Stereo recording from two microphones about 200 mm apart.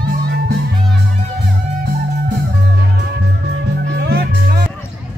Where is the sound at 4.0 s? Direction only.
55° right (ahead or behind).